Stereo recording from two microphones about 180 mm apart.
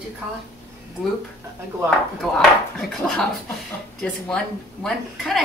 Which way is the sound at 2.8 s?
Centre (ahead or behind).